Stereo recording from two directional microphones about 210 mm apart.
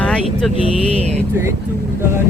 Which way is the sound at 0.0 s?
5° left (ahead or behind).